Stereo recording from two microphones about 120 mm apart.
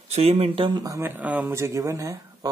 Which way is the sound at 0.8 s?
25° right (ahead or behind).